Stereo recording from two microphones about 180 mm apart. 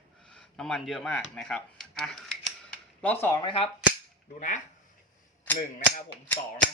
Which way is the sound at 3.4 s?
30° left (ahead or behind).